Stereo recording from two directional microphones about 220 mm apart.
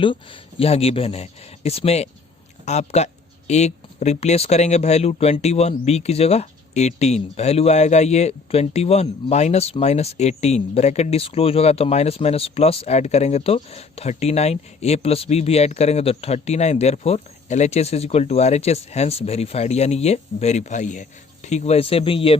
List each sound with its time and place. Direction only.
0.0 s speech: 25° left (ahead or behind)